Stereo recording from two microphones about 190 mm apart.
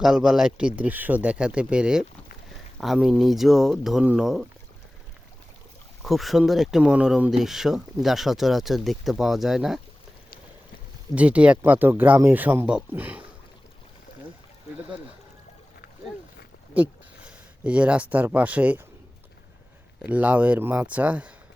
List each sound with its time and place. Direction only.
0.0 s speech: centre (ahead or behind)
6.0 s speech: centre (ahead or behind)
11.1 s speech: 5° right (ahead or behind)
16.7 s speech: 5° right (ahead or behind)
20.0 s speech: 5° right (ahead or behind)